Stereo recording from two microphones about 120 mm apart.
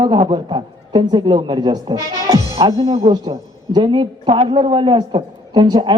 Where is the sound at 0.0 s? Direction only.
45° right (ahead or behind).